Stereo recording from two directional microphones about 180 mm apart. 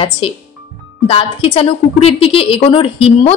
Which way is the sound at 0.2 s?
30° left (ahead or behind).